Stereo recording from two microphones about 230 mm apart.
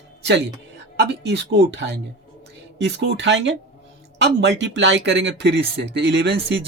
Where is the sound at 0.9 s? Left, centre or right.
Right.